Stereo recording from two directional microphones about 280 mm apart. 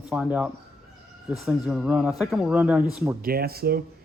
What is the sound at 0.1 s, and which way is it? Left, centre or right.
Speech, centre.